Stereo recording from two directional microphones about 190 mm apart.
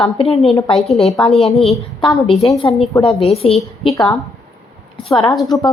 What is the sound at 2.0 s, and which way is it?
A woman's voice, 25° left (ahead or behind).